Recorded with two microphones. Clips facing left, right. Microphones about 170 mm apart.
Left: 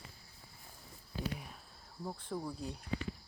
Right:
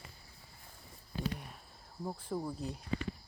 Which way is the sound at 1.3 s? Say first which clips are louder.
Right 1 dB; centre (ahead or behind).